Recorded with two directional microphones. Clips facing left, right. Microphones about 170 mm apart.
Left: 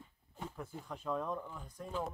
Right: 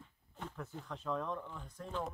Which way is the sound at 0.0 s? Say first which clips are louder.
Left 1 dB; 10° left (ahead or behind).